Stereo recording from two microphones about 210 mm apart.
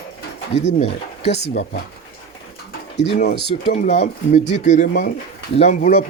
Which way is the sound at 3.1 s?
40° left (ahead or behind).